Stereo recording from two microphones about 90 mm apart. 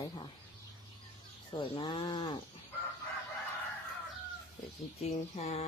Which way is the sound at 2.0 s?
60° left (ahead or behind).